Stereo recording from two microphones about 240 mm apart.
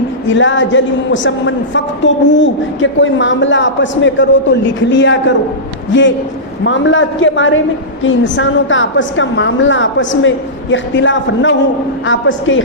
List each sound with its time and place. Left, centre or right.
0.3 s a man's voice: left